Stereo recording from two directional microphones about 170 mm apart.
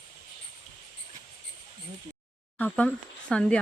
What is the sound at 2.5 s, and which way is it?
A woman's voice, 10° left (ahead or behind).